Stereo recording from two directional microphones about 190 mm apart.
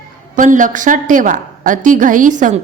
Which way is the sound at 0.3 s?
40° right (ahead or behind).